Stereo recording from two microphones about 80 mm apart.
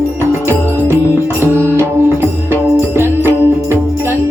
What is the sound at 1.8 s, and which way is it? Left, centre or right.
Music, right.